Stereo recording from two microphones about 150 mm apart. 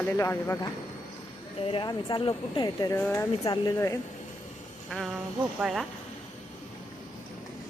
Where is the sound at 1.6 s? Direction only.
35° left (ahead or behind).